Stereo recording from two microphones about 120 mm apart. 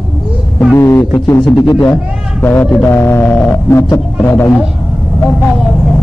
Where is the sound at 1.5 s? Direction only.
35° left (ahead or behind).